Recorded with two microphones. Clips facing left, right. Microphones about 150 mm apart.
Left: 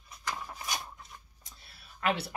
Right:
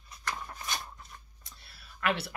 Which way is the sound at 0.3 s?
10° left (ahead or behind).